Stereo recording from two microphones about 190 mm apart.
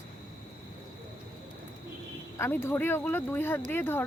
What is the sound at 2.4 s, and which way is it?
Speech, 10° left (ahead or behind).